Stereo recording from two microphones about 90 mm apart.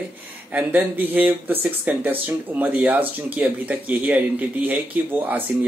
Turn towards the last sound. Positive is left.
turn(degrees=-20)  # may be behind; listen again after turning